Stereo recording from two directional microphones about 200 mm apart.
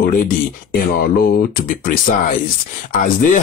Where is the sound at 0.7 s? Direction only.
50° left (ahead or behind).